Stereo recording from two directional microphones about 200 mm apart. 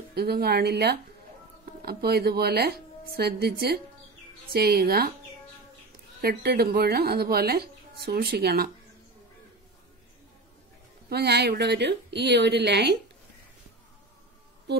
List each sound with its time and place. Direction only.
0.1 s a woman's voice: 50° right (ahead or behind)
6.2 s a woman's voice: 50° right (ahead or behind)
11.1 s a woman's voice: 55° right (ahead or behind)
14.7 s music: 55° right (ahead or behind)